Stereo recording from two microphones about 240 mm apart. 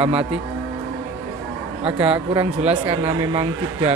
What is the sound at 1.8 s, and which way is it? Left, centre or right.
Speech, centre.